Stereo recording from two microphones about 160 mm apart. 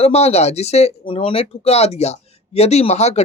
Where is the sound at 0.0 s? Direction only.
40° left (ahead or behind).